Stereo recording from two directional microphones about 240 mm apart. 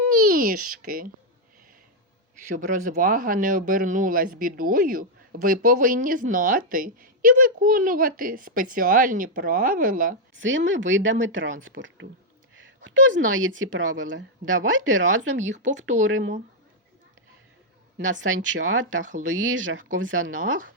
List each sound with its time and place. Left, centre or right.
0.1 s a child's voice: right
2.6 s speech: right
10.3 s a woman's voice: right
15.8 s speech: right
16.0 s speech: right
17.9 s speech: right